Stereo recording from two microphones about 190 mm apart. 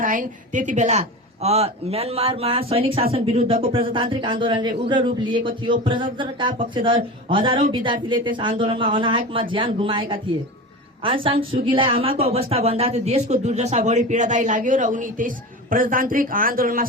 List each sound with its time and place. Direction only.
0.0 s a man's voice: 45° right (ahead or behind)